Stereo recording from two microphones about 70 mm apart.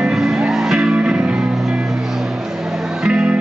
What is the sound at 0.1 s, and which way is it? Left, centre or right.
Music, centre.